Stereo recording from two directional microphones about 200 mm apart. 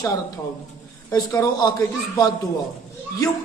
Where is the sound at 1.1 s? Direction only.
15° left (ahead or behind).